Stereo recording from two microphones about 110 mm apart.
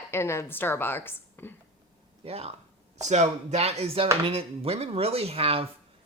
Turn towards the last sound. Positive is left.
turn(degrees=-60)  # may be behind; listen again after turning